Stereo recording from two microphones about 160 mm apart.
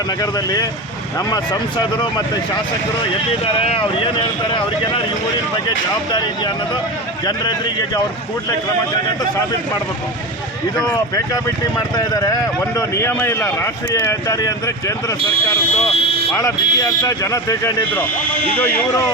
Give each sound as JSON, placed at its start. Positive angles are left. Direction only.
{"t": 0.2, "sound": "a man's voice", "side_deg": 25}
{"t": 1.8, "sound": "a man's voice", "side_deg": 25}
{"t": 3.4, "sound": "a man's voice", "side_deg": 35}
{"t": 10.8, "sound": "a man's voice", "side_deg": 25}
{"t": 16.3, "sound": "a man's voice", "side_deg": 20}